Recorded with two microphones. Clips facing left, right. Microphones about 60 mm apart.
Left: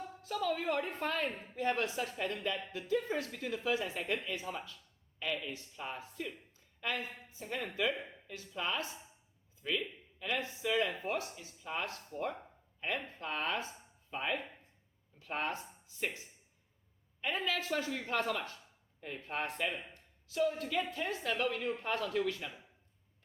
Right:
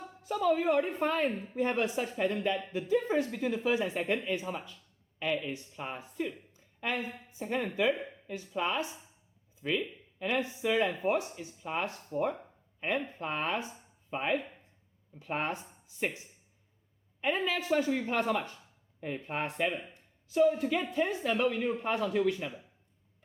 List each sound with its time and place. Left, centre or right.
0.2 s speech: centre
17.4 s speech: centre